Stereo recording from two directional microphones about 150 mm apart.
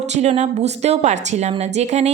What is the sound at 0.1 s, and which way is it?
A woman's voice, 50° right (ahead or behind).